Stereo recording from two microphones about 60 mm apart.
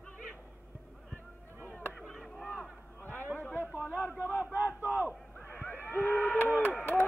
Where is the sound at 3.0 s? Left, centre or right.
Left.